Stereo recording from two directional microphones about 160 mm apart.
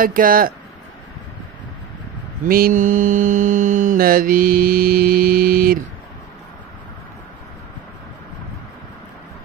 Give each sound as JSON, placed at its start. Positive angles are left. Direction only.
{"t": 0.0, "sound": "mantra", "side_deg": -60}
{"t": 2.4, "sound": "mantra", "side_deg": -65}